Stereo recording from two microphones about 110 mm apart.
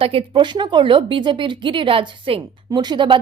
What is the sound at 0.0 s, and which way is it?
A woman's voice, 55° right (ahead or behind).